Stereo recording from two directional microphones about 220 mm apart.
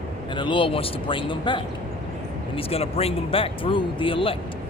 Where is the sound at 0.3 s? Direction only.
20° left (ahead or behind).